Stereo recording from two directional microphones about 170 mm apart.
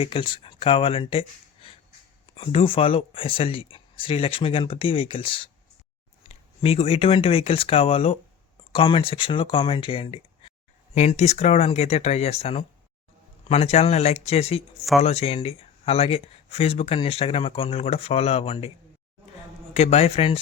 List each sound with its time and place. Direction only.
0.0 s speech: 30° left (ahead or behind)
2.3 s speech: 35° left (ahead or behind)
19.7 s speech: 40° left (ahead or behind)